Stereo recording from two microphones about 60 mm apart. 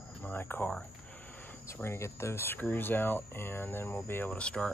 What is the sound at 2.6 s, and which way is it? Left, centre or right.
Speech, left.